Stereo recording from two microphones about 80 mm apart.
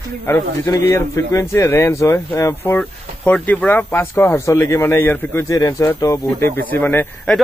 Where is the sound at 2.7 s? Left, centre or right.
Centre.